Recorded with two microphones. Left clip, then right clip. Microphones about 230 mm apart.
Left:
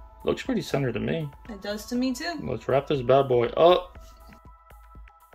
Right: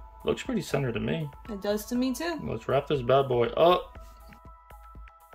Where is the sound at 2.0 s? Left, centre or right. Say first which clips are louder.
Left 1 dB; right.